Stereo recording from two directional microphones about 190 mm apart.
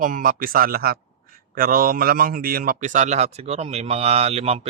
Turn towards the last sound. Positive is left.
turn(degrees=-35)  # may be behind; listen again after turning